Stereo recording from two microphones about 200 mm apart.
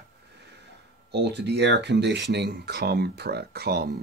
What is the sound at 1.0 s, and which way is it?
Speech, 60° right (ahead or behind).